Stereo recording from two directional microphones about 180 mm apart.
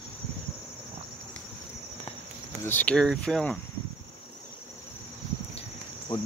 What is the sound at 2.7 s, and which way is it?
Speech, 10° left (ahead or behind).